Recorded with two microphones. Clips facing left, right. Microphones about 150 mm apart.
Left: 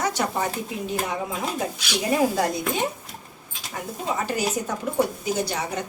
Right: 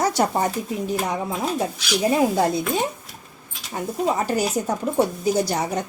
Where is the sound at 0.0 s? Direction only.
35° right (ahead or behind).